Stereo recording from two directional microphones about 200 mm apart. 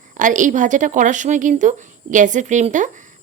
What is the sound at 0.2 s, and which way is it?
A woman's voice, 40° right (ahead or behind).